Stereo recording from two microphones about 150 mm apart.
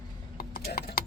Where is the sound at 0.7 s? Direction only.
90° left.